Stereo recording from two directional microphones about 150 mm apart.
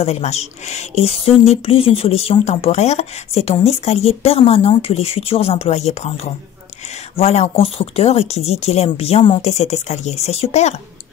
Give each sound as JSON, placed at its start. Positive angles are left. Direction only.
{"t": 0.0, "sound": "speech", "side_deg": 45}